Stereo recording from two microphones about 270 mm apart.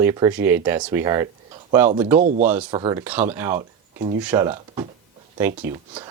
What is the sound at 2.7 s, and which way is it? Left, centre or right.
Speech, centre.